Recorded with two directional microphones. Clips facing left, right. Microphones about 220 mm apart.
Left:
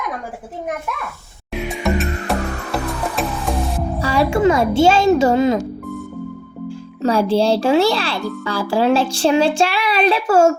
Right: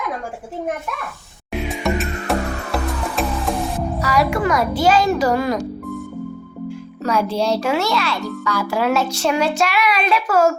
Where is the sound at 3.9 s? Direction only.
30° left (ahead or behind).